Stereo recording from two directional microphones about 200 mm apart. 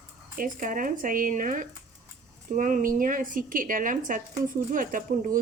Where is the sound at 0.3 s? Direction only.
45° right (ahead or behind).